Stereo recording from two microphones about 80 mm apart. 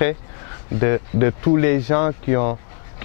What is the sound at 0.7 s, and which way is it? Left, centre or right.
Speech, centre.